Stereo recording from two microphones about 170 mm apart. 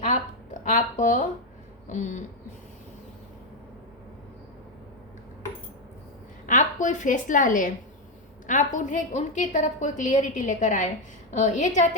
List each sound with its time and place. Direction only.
0.0 s a sound: 45° left (ahead or behind)
1.9 s a woman's voice: 45° left (ahead or behind)
6.4 s a woman's voice: 50° left (ahead or behind)